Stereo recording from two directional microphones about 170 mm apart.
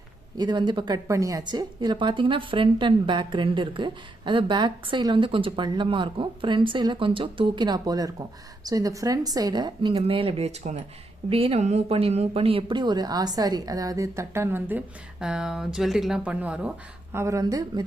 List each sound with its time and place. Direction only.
0.3 s a woman's voice: 25° right (ahead or behind)